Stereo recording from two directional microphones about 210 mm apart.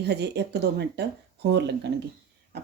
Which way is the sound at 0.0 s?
55° right (ahead or behind).